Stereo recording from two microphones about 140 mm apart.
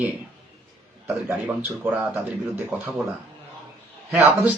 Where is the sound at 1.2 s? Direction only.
10° right (ahead or behind).